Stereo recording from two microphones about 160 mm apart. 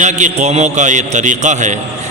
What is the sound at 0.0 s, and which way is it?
A man's voice, 50° right (ahead or behind).